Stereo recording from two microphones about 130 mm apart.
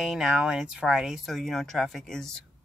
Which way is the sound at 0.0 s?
Centre (ahead or behind).